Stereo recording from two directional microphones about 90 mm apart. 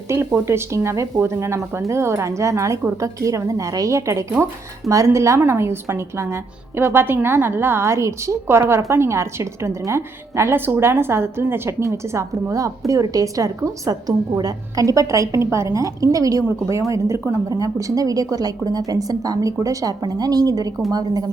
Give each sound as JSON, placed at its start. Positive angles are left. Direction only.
{"t": 0.1, "sound": "a woman's voice", "side_deg": -30}